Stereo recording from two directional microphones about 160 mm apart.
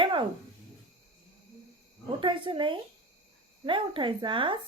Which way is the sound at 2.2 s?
30° right (ahead or behind).